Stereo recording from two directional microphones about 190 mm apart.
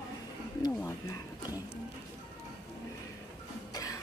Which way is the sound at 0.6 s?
15° left (ahead or behind).